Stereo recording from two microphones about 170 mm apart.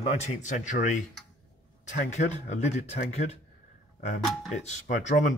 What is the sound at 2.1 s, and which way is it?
Speech, 40° left (ahead or behind).